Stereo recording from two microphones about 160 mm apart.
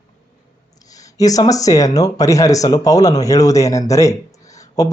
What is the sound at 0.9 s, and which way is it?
Speech, 20° left (ahead or behind).